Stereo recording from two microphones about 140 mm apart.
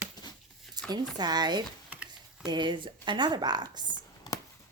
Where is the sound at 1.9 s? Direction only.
10° right (ahead or behind).